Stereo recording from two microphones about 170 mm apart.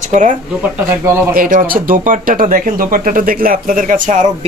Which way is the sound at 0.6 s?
15° right (ahead or behind).